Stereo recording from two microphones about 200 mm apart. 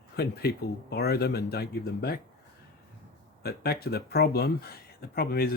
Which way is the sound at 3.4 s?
50° left (ahead or behind).